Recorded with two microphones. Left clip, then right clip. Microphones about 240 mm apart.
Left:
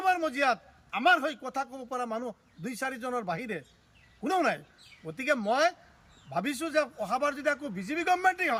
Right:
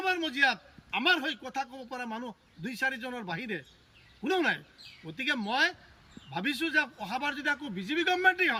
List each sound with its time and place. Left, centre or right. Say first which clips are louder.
0.2 s a man's voice: even; centre